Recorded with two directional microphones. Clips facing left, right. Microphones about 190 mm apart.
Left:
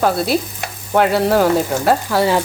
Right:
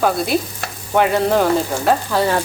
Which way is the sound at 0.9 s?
5° left (ahead or behind).